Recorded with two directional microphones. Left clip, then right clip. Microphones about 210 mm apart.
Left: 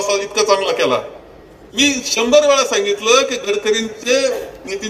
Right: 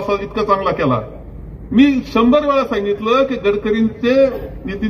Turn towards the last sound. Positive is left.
turn(degrees=20)  # may be behind; listen again after turning